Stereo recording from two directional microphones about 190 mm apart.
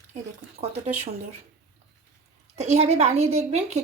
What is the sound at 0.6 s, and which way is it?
Speech, 35° right (ahead or behind).